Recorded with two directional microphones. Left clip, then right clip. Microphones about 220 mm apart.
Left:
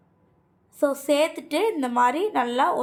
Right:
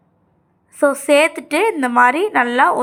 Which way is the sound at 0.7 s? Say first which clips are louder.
Right 9 dB; 15° right (ahead or behind).